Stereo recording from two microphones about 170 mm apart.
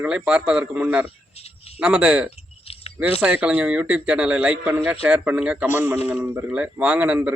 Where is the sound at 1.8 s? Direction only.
5° right (ahead or behind).